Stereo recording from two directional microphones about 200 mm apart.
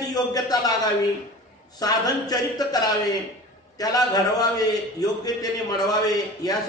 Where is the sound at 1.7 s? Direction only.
20° left (ahead or behind).